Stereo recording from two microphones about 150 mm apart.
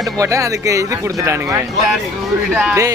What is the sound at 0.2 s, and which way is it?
Speech, 20° right (ahead or behind).